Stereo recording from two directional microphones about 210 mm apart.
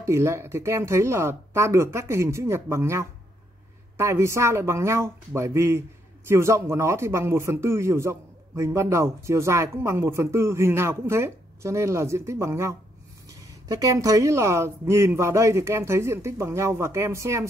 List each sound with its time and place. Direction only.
0.0 s speech: 15° right (ahead or behind)